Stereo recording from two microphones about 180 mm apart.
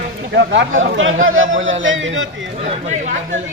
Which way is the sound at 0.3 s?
80° right.